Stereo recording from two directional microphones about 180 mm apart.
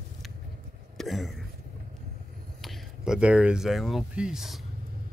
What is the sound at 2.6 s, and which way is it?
Speech, centre (ahead or behind).